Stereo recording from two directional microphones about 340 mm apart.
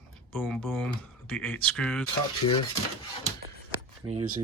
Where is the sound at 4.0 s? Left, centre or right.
Centre.